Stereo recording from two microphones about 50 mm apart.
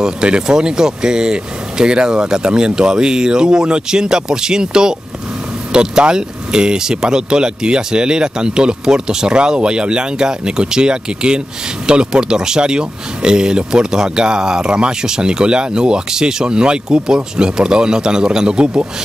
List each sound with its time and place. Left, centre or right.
0.0 s speech: centre